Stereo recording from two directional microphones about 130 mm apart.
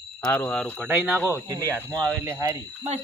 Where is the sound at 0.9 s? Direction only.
5° right (ahead or behind).